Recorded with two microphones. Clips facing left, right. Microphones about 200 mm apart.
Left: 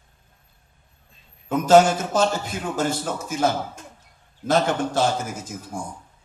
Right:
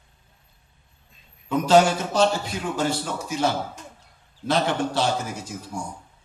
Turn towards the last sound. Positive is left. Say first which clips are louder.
# even
turn(degrees=50)  # may be behind; listen again after turning